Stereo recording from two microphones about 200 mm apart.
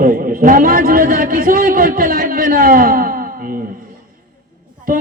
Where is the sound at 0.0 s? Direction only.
45° right (ahead or behind).